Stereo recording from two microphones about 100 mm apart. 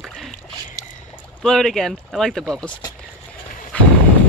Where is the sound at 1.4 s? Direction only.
5° left (ahead or behind).